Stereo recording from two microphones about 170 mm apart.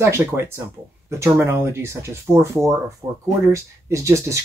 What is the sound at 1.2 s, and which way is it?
Speech, 15° right (ahead or behind).